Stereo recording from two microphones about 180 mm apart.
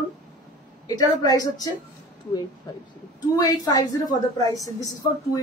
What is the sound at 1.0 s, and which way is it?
Speech, 20° left (ahead or behind).